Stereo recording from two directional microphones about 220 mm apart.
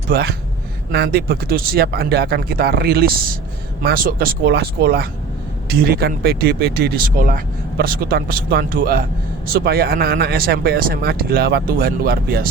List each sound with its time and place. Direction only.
0.1 s speech: 45° right (ahead or behind)